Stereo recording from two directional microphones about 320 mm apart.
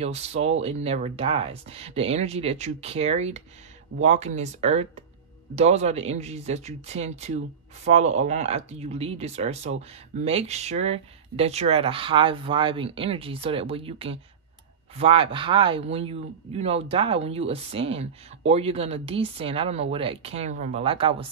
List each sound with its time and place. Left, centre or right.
0.0 s speech: centre